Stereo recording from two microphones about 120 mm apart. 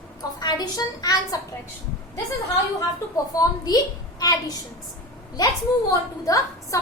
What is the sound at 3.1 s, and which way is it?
A woman's voice, 30° left (ahead or behind).